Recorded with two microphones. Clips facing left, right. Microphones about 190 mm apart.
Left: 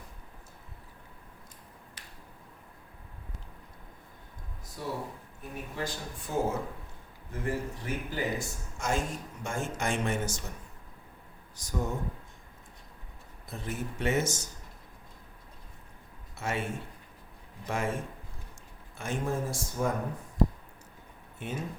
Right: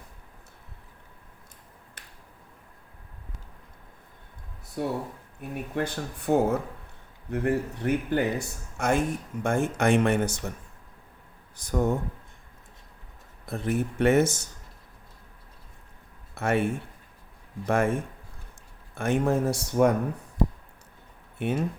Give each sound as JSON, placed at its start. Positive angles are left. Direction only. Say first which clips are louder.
{"t": 4.8, "sound": "speech", "louder": "right 7 dB", "side_deg": -60}
{"t": 11.5, "sound": "speech", "louder": "right 8 dB", "side_deg": -60}
{"t": 13.4, "sound": "speech", "louder": "right 9 dB", "side_deg": -55}
{"t": 16.3, "sound": "a man's voice", "louder": "right 8 dB", "side_deg": -55}
{"t": 17.7, "sound": "speech", "louder": "right 8 dB", "side_deg": -55}
{"t": 18.9, "sound": "speech", "louder": "right 8 dB", "side_deg": -60}
{"t": 21.3, "sound": "speech", "louder": "right 9 dB", "side_deg": -65}